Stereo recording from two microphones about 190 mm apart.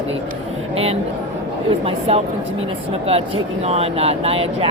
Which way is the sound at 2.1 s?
30° right (ahead or behind).